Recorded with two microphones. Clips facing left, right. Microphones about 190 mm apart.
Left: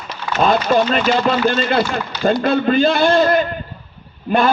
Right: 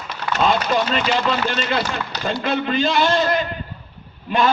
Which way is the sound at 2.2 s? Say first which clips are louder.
Left 7 dB; 50° left (ahead or behind).